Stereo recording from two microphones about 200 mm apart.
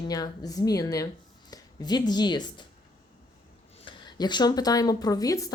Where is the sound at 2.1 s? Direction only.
20° left (ahead or behind).